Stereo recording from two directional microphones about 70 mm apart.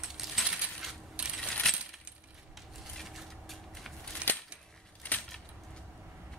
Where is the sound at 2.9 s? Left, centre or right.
Centre.